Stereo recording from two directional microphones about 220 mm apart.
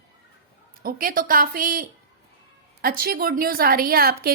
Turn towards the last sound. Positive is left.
turn(degrees=-45)  # may be behind; listen again after turning